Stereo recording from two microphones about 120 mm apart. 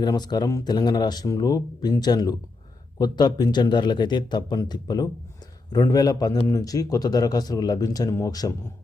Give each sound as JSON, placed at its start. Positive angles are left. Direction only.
{"t": 0.0, "sound": "a man's voice", "side_deg": 35}